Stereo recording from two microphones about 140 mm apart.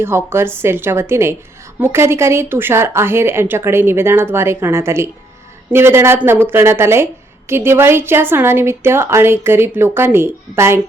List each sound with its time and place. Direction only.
0.0 s a woman's voice: 15° right (ahead or behind)